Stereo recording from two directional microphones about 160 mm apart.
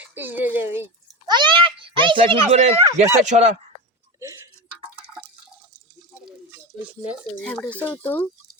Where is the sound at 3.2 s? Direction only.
50° right (ahead or behind).